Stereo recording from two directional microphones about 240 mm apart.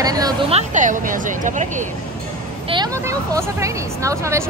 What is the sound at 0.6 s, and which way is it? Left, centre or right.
Speech, right.